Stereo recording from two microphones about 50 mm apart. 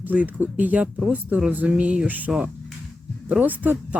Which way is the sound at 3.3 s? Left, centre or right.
Right.